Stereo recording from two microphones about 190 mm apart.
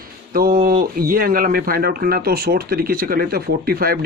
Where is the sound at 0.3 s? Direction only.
50° right (ahead or behind).